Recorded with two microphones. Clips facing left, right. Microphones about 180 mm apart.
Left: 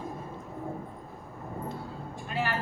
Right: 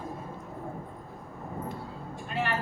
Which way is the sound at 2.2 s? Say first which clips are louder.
Even; 5° left (ahead or behind).